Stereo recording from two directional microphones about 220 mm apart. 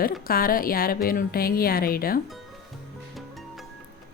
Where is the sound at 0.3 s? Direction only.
40° left (ahead or behind).